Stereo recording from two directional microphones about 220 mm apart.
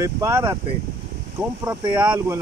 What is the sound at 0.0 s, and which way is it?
Speech, 10° right (ahead or behind).